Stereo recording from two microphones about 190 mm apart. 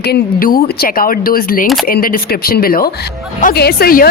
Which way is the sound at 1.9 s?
50° left (ahead or behind).